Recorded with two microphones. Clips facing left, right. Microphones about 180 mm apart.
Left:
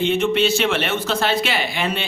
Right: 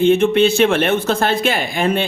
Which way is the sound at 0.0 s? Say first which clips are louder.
Right 6 dB; 55° right (ahead or behind).